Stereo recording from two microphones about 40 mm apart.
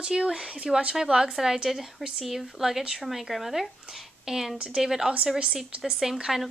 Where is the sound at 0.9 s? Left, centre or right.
Centre.